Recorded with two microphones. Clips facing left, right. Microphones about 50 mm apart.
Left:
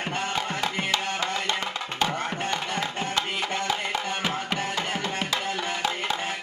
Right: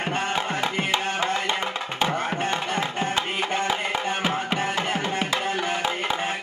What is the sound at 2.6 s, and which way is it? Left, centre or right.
Music, right.